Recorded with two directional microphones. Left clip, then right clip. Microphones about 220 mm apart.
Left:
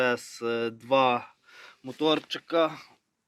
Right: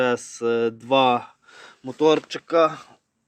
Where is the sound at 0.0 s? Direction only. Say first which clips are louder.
Right 5 dB; 30° right (ahead or behind).